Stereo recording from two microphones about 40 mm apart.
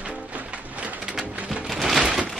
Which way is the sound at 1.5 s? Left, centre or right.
Centre.